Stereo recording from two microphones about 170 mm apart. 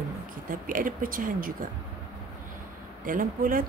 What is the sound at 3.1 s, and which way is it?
Speech, 55° right (ahead or behind).